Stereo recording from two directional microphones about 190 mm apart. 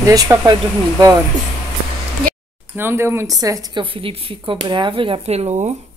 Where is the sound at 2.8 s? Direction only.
10° right (ahead or behind).